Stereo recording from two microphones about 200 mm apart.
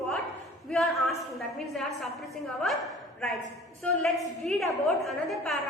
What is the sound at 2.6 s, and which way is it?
A woman's voice, centre (ahead or behind).